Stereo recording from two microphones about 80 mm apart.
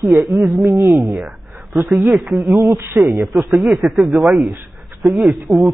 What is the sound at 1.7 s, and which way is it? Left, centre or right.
Speech, centre.